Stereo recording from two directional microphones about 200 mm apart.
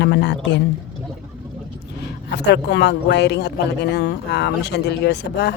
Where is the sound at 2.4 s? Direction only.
55° left (ahead or behind).